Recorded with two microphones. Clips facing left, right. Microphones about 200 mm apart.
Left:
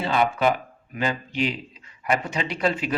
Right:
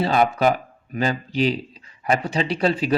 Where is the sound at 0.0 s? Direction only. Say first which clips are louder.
Right 3 dB; 40° right (ahead or behind).